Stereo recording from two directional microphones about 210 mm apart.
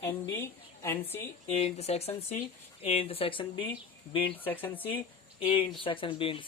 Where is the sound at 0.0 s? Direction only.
10° left (ahead or behind).